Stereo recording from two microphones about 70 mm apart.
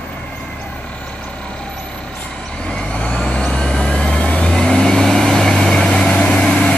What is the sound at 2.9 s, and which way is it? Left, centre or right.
Vehicle, centre.